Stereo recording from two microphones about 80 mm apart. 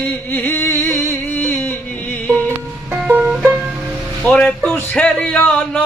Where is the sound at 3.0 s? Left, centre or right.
Right.